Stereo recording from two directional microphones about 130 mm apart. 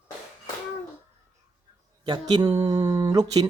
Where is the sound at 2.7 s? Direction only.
30° right (ahead or behind).